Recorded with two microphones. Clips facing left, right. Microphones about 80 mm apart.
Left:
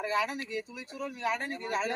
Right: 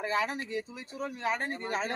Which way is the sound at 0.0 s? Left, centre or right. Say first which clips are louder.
Even; right.